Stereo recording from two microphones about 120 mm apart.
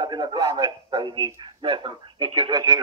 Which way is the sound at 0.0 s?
35° right (ahead or behind).